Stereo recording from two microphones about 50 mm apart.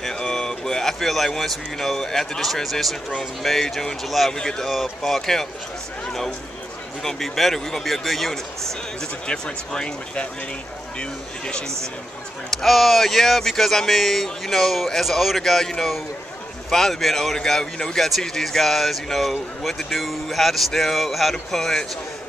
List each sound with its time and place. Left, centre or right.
0.0 s speech: centre
4.3 s speech: centre
4.6 s speech: centre
7.0 s speech: centre
9.3 s speech: centre
12.4 s speech: centre